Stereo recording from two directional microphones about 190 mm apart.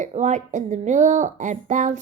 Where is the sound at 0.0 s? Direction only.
40° right (ahead or behind).